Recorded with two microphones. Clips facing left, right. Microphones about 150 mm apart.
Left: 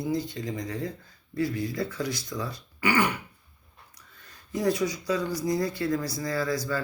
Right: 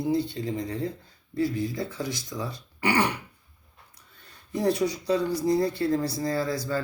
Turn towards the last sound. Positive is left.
turn(degrees=-25)  # may be behind; listen again after turning